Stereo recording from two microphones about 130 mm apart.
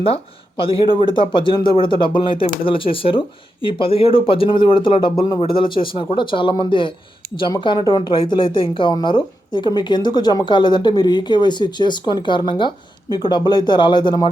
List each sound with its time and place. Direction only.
0.0 s speech: 45° left (ahead or behind)